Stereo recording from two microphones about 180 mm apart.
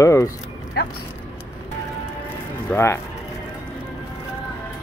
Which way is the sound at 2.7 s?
15° left (ahead or behind).